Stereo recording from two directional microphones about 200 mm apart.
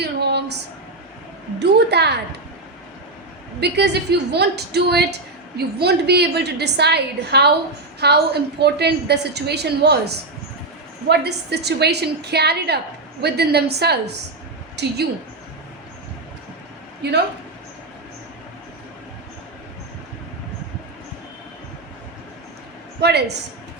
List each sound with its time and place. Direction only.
0.0 s a sound: 55° right (ahead or behind)
3.6 s a woman's voice: 55° right (ahead or behind)
23.0 s a woman's voice: 55° right (ahead or behind)